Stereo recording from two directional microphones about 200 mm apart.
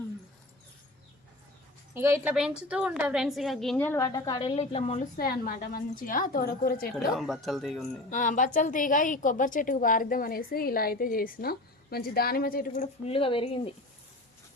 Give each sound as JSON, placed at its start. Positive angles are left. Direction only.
{"t": 1.9, "sound": "a woman's voice", "side_deg": -10}
{"t": 5.1, "sound": "a woman's voice", "side_deg": 45}
{"t": 7.1, "sound": "a woman's voice", "side_deg": 0}
{"t": 8.1, "sound": "a woman's voice", "side_deg": 40}
{"t": 13.1, "sound": "a woman's voice", "side_deg": 25}